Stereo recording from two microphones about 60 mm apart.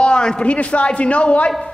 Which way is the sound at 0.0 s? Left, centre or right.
Centre.